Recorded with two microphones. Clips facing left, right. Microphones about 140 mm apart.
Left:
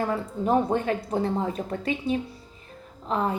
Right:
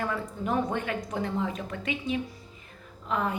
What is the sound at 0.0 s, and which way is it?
Speech, 30° left (ahead or behind).